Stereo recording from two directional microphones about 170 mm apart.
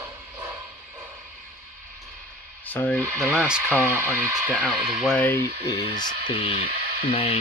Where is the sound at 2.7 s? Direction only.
10° left (ahead or behind).